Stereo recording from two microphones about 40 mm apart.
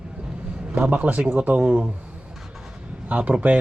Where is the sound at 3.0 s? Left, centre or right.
Right.